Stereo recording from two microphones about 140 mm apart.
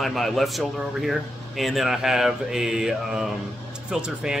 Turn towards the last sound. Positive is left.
turn(degrees=-5)  # may be behind; listen again after turning